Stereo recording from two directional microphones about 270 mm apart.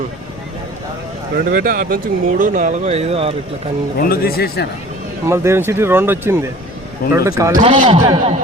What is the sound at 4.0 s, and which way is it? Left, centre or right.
Speech, left.